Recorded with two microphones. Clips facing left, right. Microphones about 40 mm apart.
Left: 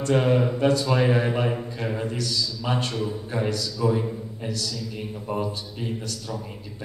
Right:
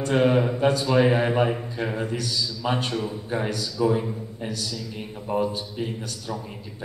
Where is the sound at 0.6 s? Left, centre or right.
Right.